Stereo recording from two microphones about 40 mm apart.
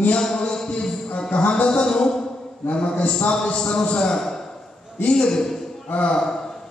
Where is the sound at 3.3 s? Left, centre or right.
Centre.